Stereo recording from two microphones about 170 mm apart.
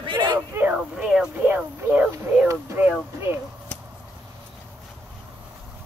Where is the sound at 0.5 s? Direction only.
10° right (ahead or behind).